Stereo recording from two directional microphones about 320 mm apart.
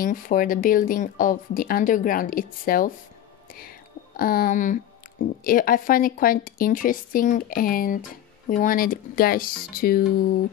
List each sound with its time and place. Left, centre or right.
0.0 s a woman's voice: left
4.2 s a woman's voice: left